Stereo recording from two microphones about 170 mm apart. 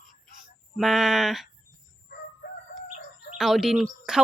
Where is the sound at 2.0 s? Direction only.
60° left (ahead or behind).